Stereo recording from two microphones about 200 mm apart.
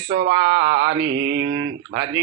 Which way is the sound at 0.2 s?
55° right (ahead or behind).